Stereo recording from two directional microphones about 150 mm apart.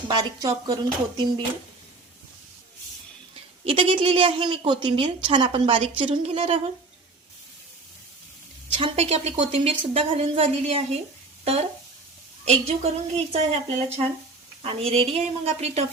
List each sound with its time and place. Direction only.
0.1 s speech: 25° right (ahead or behind)
3.6 s a woman's voice: 35° right (ahead or behind)
8.8 s a woman's voice: 45° right (ahead or behind)
12.5 s speech: 45° right (ahead or behind)